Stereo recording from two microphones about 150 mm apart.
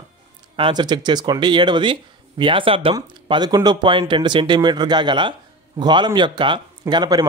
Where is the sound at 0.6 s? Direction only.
30° right (ahead or behind).